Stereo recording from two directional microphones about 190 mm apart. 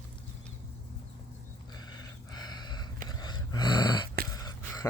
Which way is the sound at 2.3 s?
20° left (ahead or behind).